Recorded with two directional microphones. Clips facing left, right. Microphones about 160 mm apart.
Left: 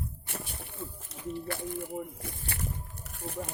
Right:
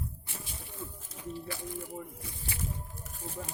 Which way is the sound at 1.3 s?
60° left (ahead or behind).